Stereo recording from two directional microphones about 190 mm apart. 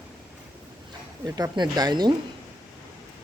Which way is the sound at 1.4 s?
20° right (ahead or behind).